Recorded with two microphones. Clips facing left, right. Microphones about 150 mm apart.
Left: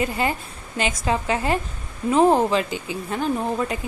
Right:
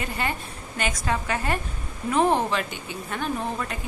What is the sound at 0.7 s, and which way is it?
Speech, 20° left (ahead or behind).